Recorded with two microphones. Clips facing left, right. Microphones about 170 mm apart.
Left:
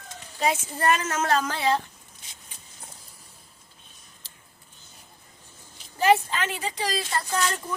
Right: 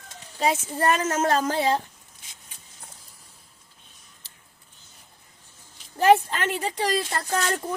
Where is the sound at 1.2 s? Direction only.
40° right (ahead or behind).